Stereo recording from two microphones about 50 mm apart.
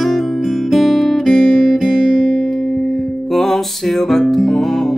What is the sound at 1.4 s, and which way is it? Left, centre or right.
Music, centre.